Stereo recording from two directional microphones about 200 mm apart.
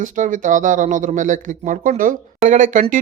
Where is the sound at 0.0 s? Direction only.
40° right (ahead or behind).